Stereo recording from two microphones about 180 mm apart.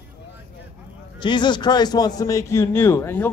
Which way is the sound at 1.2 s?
25° left (ahead or behind).